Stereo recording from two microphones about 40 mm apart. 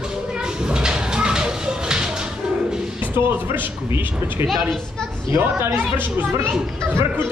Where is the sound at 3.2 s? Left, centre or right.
Right.